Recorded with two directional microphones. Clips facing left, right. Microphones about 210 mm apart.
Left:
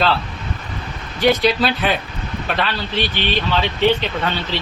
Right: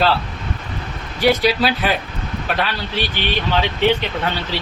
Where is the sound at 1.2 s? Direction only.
5° right (ahead or behind).